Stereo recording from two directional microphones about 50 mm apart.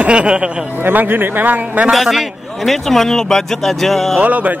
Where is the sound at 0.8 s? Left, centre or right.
Right.